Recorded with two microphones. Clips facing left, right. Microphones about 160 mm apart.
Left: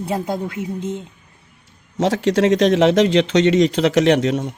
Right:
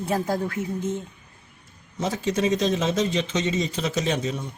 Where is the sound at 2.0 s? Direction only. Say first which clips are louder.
Left 8 dB; 85° left.